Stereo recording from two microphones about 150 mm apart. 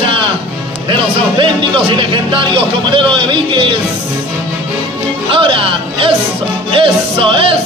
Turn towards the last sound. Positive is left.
turn(degrees=-35)  # may be behind; listen again after turning